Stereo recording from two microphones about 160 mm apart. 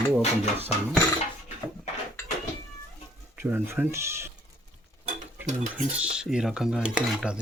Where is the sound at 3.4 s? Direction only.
15° right (ahead or behind).